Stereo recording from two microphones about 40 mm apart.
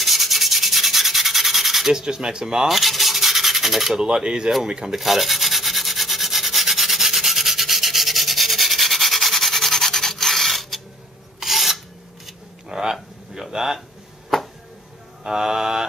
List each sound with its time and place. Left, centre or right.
0.0 s rub: centre
2.0 s speech: centre
2.7 s rub: centre
4.0 s speech: right
4.9 s rub: centre
11.3 s filing: centre
12.6 s a sound: centre
15.2 s mantra: centre